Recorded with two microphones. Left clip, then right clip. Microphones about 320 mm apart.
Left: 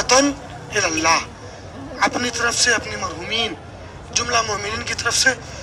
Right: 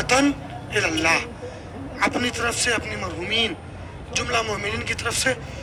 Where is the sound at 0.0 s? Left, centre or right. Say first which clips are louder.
Left 4 dB; centre.